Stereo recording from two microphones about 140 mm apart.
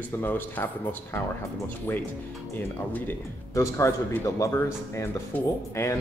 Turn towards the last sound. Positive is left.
turn(degrees=20)  # may be behind; listen again after turning